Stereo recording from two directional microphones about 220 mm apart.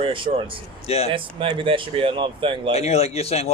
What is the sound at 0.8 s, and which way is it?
Speech, 30° left (ahead or behind).